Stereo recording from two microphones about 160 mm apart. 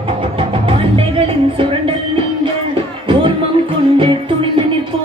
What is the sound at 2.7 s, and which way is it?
Music, 35° right (ahead or behind).